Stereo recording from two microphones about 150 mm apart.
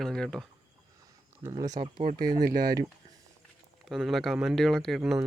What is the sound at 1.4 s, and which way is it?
Speech, 25° right (ahead or behind).